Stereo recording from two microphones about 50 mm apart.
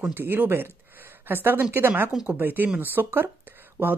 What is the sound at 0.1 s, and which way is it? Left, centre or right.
Speech, right.